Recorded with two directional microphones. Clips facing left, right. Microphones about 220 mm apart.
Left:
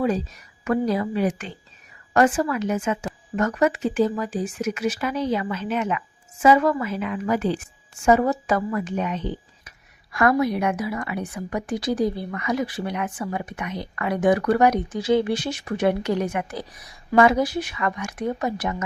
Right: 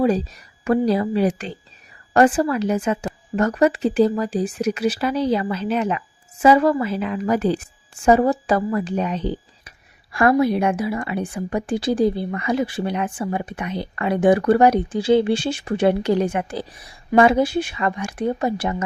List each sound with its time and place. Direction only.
0.6 s speech: 30° right (ahead or behind)